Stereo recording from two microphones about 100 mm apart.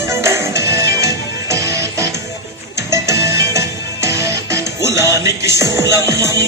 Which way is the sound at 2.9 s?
30° right (ahead or behind).